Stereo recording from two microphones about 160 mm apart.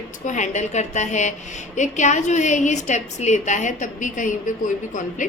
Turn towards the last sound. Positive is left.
turn(degrees=55)  # may be behind; listen again after turning